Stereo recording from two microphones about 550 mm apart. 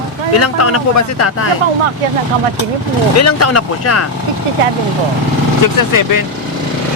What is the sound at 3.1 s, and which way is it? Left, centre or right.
Speech, left.